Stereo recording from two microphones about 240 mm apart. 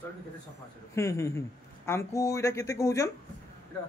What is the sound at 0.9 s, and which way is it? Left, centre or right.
Speech, centre.